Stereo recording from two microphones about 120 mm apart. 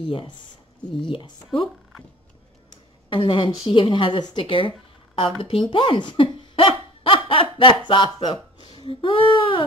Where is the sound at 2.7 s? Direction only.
45° left (ahead or behind).